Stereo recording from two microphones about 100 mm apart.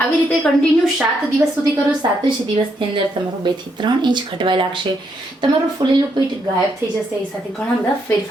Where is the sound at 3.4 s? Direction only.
50° right (ahead or behind).